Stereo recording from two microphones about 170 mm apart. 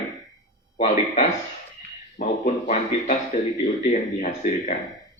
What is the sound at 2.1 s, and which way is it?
A man's voice, 50° left (ahead or behind).